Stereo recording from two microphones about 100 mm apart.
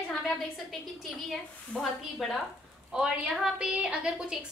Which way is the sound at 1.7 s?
10° left (ahead or behind).